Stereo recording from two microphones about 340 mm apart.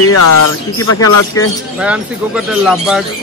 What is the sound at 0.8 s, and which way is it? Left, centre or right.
Speech, left.